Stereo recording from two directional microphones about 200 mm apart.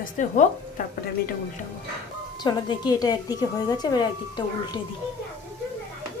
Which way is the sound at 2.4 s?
20° left (ahead or behind).